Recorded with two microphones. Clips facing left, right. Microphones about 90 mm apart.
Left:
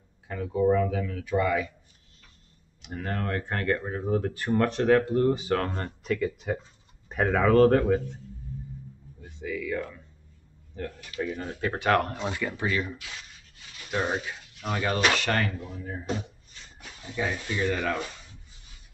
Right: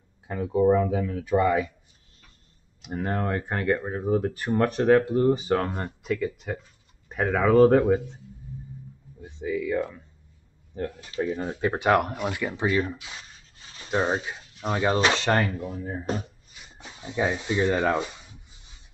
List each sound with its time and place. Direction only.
0.3 s speech: 20° right (ahead or behind)
2.9 s speech: 25° right (ahead or behind)
9.2 s speech: 20° right (ahead or behind)
11.0 s speech: 30° right (ahead or behind)
16.7 s a sound: 20° right (ahead or behind)